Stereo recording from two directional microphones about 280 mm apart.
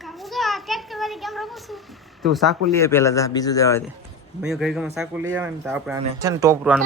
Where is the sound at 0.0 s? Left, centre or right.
Centre.